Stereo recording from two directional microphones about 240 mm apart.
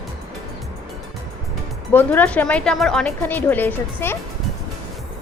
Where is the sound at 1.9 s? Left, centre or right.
Centre.